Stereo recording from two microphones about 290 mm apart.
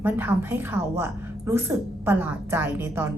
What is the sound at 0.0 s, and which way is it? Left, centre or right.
A woman's voice, centre.